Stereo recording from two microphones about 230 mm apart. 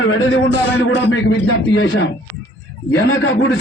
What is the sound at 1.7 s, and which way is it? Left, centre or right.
Speech, left.